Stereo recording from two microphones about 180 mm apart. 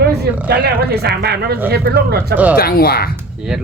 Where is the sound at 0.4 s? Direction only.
60° right (ahead or behind).